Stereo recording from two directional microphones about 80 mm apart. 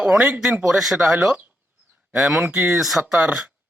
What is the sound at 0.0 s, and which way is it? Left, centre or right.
Speech, centre.